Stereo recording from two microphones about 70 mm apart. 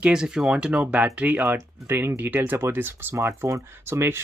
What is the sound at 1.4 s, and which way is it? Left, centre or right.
Speech, right.